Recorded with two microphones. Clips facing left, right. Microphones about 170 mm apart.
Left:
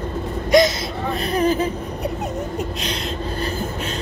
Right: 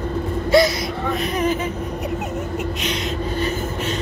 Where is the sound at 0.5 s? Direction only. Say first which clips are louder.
Left 1 dB; 20° left (ahead or behind).